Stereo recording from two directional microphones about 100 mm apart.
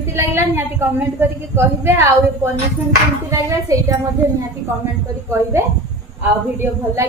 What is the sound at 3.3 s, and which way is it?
Speech, 35° right (ahead or behind).